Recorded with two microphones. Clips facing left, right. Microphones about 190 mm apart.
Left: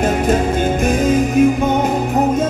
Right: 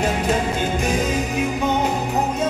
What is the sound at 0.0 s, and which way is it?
Music, 50° left (ahead or behind).